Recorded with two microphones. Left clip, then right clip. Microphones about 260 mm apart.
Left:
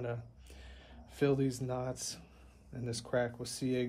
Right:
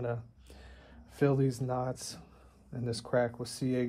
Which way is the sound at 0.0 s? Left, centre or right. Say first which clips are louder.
Right 4 dB; centre.